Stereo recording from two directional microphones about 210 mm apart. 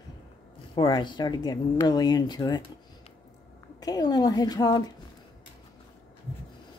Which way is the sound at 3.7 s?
20° left (ahead or behind).